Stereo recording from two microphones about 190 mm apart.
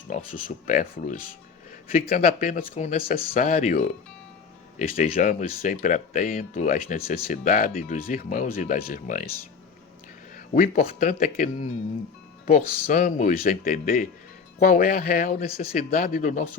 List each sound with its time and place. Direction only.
0.1 s speech: 45° left (ahead or behind)
10.3 s speech: 45° left (ahead or behind)